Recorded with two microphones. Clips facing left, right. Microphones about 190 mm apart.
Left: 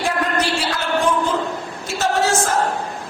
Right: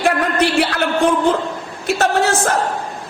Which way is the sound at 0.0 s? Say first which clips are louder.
Right 4 dB; 60° right (ahead or behind).